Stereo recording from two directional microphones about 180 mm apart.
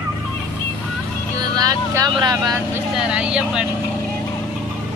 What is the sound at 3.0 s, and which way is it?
Speech, 5° right (ahead or behind).